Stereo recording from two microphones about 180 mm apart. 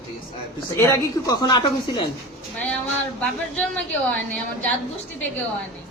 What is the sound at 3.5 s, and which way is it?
A woman's voice, 5° left (ahead or behind).